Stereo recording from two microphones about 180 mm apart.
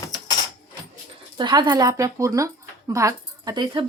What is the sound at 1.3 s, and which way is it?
Speech, 25° right (ahead or behind).